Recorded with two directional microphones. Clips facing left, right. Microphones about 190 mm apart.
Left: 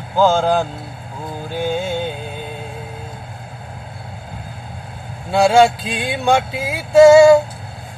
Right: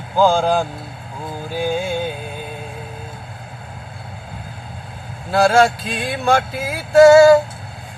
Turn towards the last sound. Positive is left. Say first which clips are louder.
# left 1 dB
turn(degrees=0)  # may be behind; listen again after turning